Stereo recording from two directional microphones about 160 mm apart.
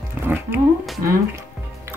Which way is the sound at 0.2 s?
15° right (ahead or behind).